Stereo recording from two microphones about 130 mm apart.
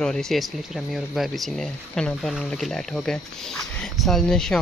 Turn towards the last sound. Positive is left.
turn(degrees=5)  # may be behind; listen again after turning